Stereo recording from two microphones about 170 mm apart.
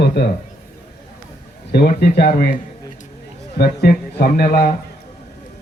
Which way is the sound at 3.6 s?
65° left (ahead or behind).